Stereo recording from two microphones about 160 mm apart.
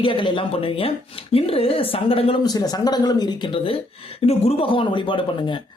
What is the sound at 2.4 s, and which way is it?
Speech, 25° left (ahead or behind).